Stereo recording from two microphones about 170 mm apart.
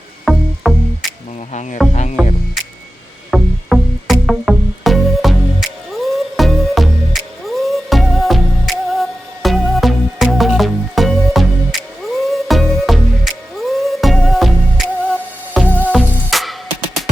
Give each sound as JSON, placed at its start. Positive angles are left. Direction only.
{"t": 0.3, "sound": "music", "side_deg": -5}
{"t": 1.9, "sound": "music", "side_deg": 45}
{"t": 3.3, "sound": "music", "side_deg": 0}